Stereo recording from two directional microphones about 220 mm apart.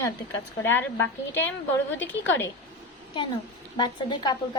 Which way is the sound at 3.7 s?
20° left (ahead or behind).